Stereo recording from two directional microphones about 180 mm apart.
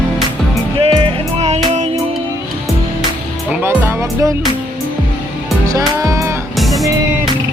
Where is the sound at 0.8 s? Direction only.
30° right (ahead or behind).